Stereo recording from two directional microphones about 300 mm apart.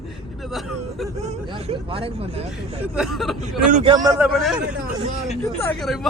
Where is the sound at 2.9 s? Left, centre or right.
Centre.